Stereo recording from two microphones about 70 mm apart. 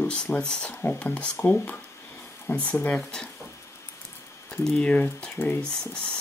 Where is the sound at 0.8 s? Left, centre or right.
Left.